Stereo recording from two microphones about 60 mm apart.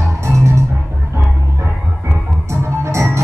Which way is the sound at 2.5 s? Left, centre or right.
Right.